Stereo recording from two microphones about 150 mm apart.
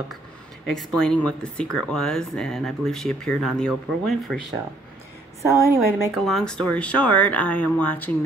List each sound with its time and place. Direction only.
0.7 s speech: 5° left (ahead or behind)
5.5 s a woman's voice: 15° right (ahead or behind)
6.1 s speech: centre (ahead or behind)